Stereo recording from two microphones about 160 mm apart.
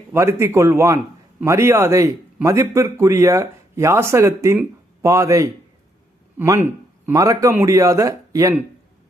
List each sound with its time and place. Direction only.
0.1 s a man's voice: 15° right (ahead or behind)